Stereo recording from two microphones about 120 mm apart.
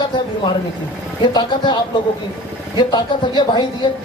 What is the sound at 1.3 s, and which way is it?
A woman's voice, 40° left (ahead or behind).